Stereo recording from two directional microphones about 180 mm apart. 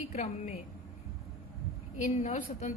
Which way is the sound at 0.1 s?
40° left (ahead or behind).